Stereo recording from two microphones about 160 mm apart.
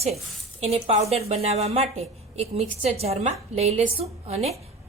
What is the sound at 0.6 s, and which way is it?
A woman's voice, 40° right (ahead or behind).